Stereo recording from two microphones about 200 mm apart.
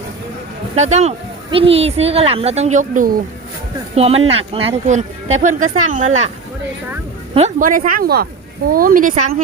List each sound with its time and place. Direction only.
0.8 s speech: 35° right (ahead or behind)
7.3 s speech: 40° right (ahead or behind)